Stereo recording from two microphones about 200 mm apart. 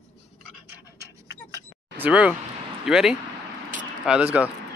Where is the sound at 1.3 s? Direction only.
15° right (ahead or behind).